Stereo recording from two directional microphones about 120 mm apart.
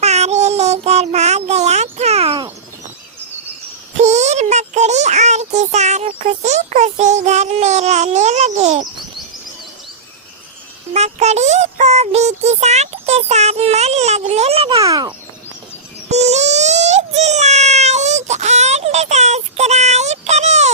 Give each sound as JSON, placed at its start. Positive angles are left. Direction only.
{"t": 0.0, "sound": "child singing", "side_deg": -65}
{"t": 3.9, "sound": "speech", "side_deg": -70}
{"t": 10.9, "sound": "music", "side_deg": -65}
{"t": 14.8, "sound": "speech", "side_deg": -30}
{"t": 16.0, "sound": "a sound", "side_deg": -70}